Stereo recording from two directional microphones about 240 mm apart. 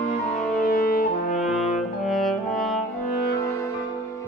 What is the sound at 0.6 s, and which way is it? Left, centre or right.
Brass instrument, left.